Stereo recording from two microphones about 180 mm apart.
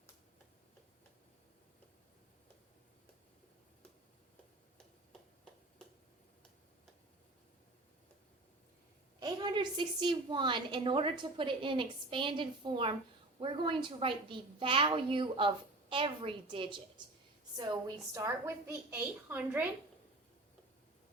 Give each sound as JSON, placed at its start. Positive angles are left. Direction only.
{"t": 9.2, "sound": "a woman's voice", "side_deg": -25}